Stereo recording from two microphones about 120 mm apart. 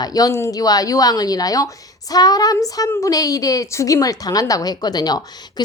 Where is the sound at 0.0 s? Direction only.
30° left (ahead or behind).